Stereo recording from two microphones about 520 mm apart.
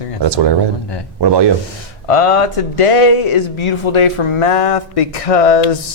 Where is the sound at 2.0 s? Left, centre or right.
Left.